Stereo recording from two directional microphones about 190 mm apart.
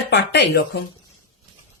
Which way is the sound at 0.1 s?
65° left (ahead or behind).